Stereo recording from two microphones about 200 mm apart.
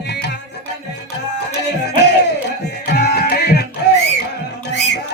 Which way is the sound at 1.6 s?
55° left (ahead or behind).